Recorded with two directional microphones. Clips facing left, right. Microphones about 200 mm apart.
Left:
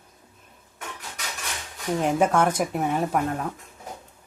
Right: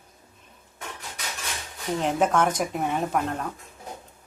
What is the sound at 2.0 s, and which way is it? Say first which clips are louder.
Speech: left 2 dB; 5° left (ahead or behind).